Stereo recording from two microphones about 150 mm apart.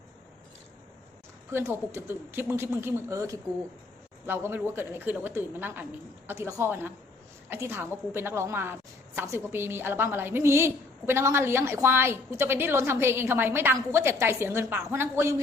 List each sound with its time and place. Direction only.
1.5 s a woman's voice: 15° right (ahead or behind)